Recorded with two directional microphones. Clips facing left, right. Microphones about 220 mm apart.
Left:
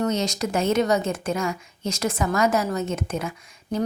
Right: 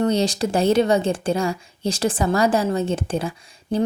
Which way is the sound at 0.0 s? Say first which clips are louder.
Right 4 dB; 30° right (ahead or behind).